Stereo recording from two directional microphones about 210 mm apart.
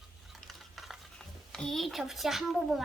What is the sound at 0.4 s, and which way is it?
Stir, centre (ahead or behind).